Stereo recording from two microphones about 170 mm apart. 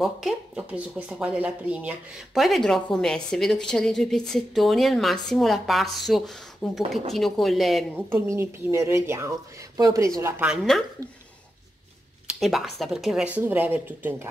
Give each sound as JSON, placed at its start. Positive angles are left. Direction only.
{"t": 0.0, "sound": "speech", "side_deg": 0}
{"t": 8.1, "sound": "speech", "side_deg": -15}
{"t": 12.3, "sound": "a sound", "side_deg": 0}
{"t": 12.7, "sound": "speech", "side_deg": 0}